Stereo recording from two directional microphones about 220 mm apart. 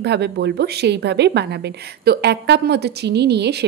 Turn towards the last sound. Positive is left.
turn(degrees=-50)  # may be behind; listen again after turning